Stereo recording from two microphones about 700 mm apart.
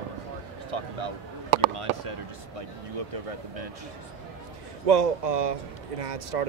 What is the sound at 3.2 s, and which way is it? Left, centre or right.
Speech, right.